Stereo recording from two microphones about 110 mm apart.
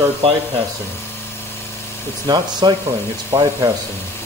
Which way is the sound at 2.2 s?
40° right (ahead or behind).